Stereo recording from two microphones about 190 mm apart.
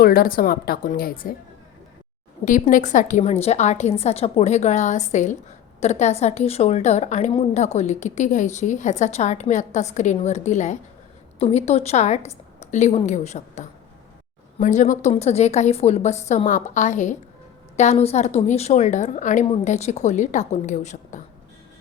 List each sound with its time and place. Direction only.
0.0 s a woman's voice: 50° left (ahead or behind)
2.4 s a woman's voice: 45° left (ahead or behind)